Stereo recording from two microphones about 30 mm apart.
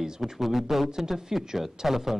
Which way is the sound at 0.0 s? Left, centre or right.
Centre.